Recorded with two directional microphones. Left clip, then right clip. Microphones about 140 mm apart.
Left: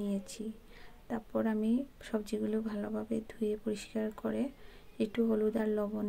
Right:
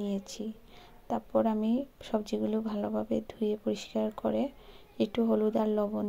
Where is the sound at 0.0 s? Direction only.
15° right (ahead or behind).